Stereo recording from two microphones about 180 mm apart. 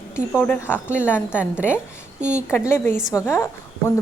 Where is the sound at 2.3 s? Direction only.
15° left (ahead or behind).